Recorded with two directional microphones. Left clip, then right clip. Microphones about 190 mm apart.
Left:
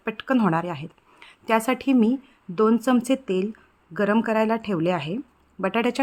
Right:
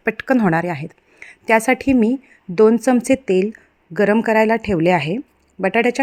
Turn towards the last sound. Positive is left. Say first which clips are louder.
# right 7 dB
turn(degrees=-15)  # may be behind; listen again after turning